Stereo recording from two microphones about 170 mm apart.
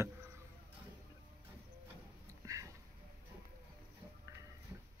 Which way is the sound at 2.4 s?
20° right (ahead or behind).